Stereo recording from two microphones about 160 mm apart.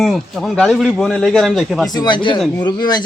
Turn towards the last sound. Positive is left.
turn(degrees=25)  # may be behind; listen again after turning